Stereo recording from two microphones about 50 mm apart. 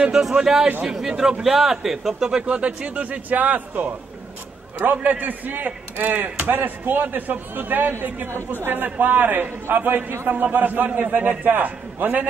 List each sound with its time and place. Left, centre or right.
0.1 s a man's voice: centre; by 3.9 s right
4.9 s speech: right